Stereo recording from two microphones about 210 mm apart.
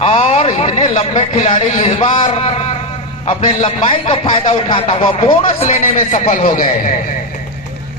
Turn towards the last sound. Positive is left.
turn(degrees=40)  # may be behind; listen again after turning